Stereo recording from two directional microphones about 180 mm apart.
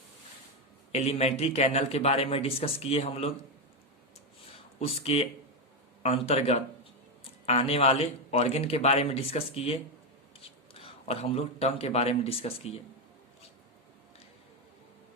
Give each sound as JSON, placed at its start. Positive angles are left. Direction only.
{"t": 0.9, "sound": "a man's voice", "side_deg": 35}
{"t": 4.8, "sound": "a man's voice", "side_deg": 35}
{"t": 10.8, "sound": "a man's voice", "side_deg": 35}